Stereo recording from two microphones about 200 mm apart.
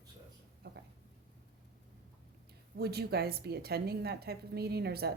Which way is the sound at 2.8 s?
55° right (ahead or behind).